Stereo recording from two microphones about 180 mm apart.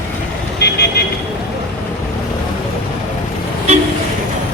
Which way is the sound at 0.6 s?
65° left (ahead or behind).